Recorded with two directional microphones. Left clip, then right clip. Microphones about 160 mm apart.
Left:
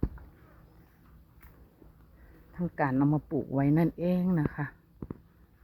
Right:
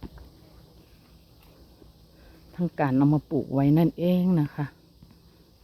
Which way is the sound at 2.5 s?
25° right (ahead or behind).